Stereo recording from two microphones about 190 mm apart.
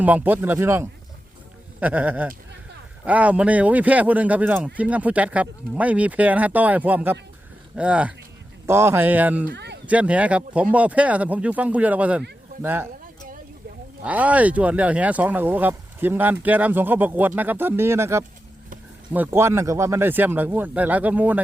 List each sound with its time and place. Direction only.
0.0 s speech: 10° right (ahead or behind)
9.5 s speech: 65° right (ahead or behind)
9.8 s speech: 5° right (ahead or behind)
14.0 s speech: 10° right (ahead or behind)